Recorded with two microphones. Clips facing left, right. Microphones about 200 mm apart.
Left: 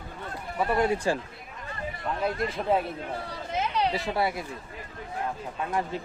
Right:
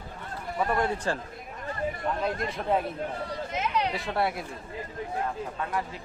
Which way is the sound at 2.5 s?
5° left (ahead or behind).